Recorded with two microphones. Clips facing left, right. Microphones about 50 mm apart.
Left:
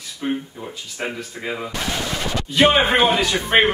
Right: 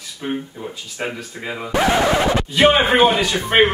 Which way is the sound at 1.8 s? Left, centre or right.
Right.